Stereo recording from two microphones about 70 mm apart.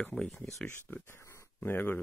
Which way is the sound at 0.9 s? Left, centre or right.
Left.